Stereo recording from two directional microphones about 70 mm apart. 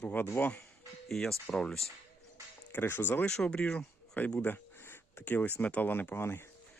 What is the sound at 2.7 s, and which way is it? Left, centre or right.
Speech, left.